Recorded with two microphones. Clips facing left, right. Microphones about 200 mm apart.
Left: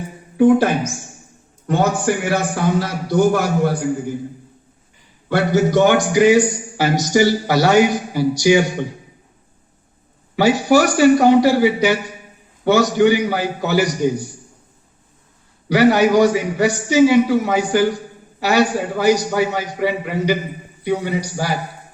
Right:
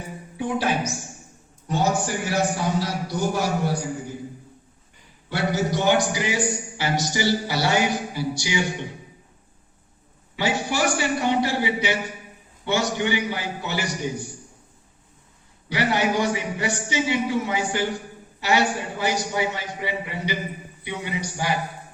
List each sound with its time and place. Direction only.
0.3 s a man's voice: 50° left (ahead or behind)
5.3 s a man's voice: 55° left (ahead or behind)
10.3 s a man's voice: 45° left (ahead or behind)
15.8 s a man's voice: 40° left (ahead or behind)